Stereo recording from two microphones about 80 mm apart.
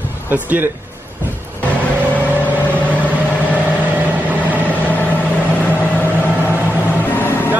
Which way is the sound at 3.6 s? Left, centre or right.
Right.